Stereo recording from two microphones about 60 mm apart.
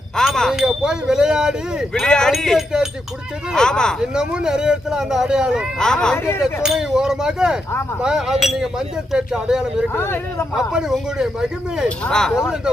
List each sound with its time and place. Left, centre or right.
0.3 s wind chime: centre
0.5 s speech: centre
1.9 s speech: centre
2.6 s speech: centre
3.5 s speech: centre
4.0 s speech: centre
5.8 s speech: centre
6.4 s speech: centre
9.9 s speech: left
10.5 s speech: centre
12.0 s speech: centre
12.4 s speech: centre